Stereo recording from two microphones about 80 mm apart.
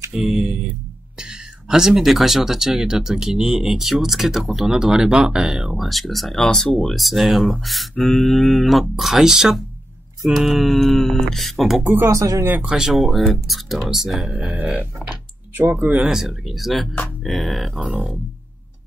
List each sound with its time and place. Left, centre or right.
0.1 s speech: centre
11.8 s speech: right
12.1 s speech: right
12.6 s speech: centre
14.6 s speech: right
15.9 s speech: centre
17.6 s speech: centre